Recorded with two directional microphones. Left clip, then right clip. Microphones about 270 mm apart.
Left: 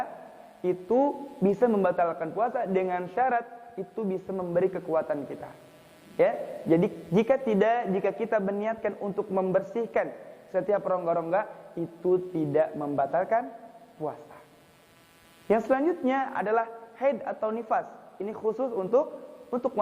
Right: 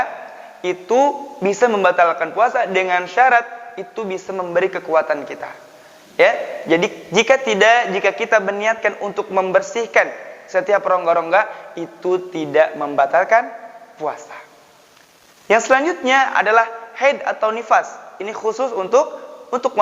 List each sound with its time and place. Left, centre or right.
0.0 s a man's voice: centre
15.4 s a man's voice: centre
19.0 s a sound: centre